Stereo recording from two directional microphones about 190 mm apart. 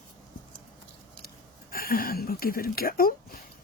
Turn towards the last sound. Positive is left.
turn(degrees=50)  # may be behind; listen again after turning